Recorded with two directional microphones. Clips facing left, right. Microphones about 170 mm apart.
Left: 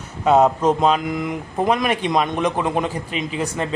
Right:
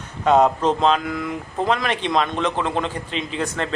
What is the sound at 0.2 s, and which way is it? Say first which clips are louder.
A man's voice: left 1 dB; 5° left (ahead or behind).